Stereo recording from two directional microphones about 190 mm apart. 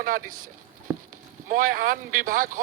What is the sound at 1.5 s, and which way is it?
A man's voice, 45° right (ahead or behind).